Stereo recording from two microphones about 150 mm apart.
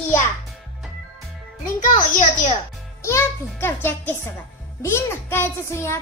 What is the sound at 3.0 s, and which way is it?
A child's voice, 20° left (ahead or behind).